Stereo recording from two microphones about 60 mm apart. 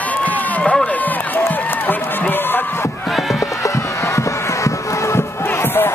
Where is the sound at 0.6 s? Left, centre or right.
Centre.